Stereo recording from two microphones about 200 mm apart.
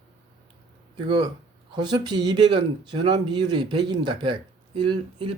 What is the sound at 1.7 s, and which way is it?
Speech, 20° right (ahead or behind).